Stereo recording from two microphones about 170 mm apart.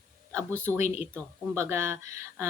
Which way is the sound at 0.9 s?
15° right (ahead or behind).